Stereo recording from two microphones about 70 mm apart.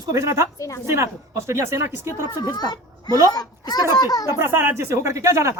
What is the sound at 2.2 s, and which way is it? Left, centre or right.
Speech, left.